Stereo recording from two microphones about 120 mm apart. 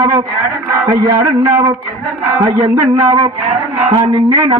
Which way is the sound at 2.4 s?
30° right (ahead or behind).